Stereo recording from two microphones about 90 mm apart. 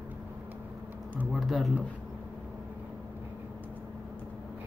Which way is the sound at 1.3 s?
Centre (ahead or behind).